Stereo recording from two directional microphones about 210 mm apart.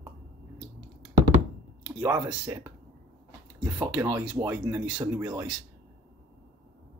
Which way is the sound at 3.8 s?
10° right (ahead or behind).